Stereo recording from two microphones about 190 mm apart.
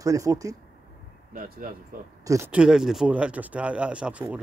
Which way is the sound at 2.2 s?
15° right (ahead or behind).